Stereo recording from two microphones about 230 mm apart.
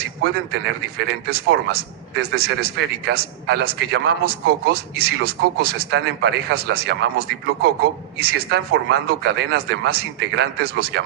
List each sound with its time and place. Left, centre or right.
0.2 s a man's voice: right